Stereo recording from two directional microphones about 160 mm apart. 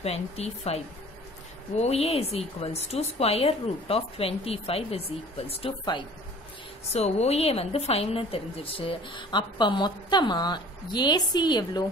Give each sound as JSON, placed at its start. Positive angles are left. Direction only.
{"t": 0.0, "sound": "a woman's voice", "side_deg": 40}
{"t": 1.8, "sound": "a woman's voice", "side_deg": 40}